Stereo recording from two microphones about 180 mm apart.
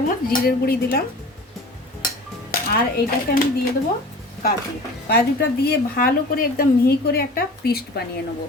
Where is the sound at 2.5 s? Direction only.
50° left (ahead or behind).